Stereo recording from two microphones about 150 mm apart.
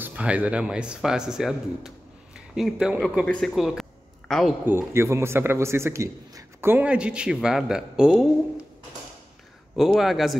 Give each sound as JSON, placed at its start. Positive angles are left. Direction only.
{"t": 0.0, "sound": "a man's voice", "side_deg": -10}
{"t": 4.6, "sound": "a man's voice", "side_deg": -15}
{"t": 9.8, "sound": "speech", "side_deg": 0}